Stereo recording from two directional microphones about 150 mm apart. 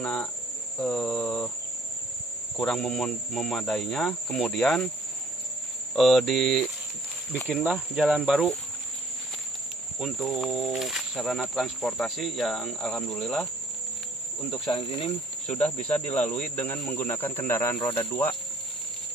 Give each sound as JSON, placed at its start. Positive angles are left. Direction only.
{"t": 0.0, "sound": "speech", "side_deg": 10}
{"t": 2.5, "sound": "speech", "side_deg": 0}
{"t": 5.9, "sound": "speech", "side_deg": 0}
{"t": 7.9, "sound": "speech", "side_deg": -5}
{"t": 9.9, "sound": "speech", "side_deg": 0}
{"t": 14.7, "sound": "speech", "side_deg": 40}
{"t": 15.4, "sound": "speech", "side_deg": 5}